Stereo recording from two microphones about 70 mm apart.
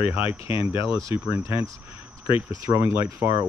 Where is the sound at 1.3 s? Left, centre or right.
Right.